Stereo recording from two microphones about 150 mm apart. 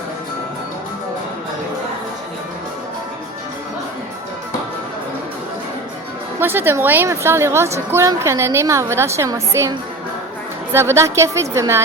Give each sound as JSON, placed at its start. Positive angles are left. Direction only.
{"t": 6.4, "sound": "a woman's voice", "side_deg": -15}